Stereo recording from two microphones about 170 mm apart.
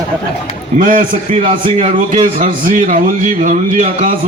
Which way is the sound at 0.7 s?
50° right (ahead or behind).